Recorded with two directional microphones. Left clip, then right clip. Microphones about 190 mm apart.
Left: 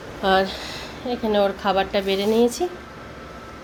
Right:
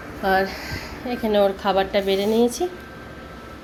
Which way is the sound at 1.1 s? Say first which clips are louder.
Right 1 dB; centre (ahead or behind).